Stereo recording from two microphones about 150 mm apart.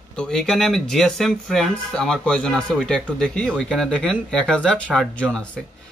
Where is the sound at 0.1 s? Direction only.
5° left (ahead or behind).